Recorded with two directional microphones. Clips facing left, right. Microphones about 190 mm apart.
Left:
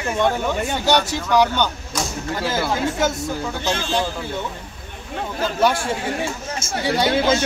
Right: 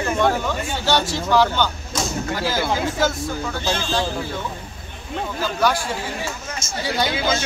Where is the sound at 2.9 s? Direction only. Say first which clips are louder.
Even; 20° left (ahead or behind).